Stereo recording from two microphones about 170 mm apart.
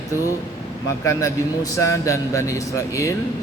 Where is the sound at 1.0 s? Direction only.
20° left (ahead or behind).